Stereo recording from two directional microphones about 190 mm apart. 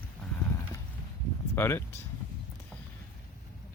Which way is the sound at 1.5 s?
15° left (ahead or behind).